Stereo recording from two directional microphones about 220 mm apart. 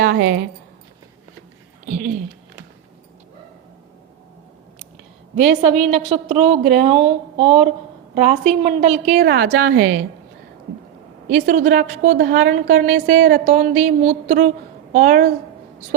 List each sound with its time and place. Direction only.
0.0 s speech: 45° right (ahead or behind)
1.9 s a woman's voice: 35° right (ahead or behind)
5.9 s a woman's voice: 30° right (ahead or behind)
11.3 s a woman's voice: 35° right (ahead or behind)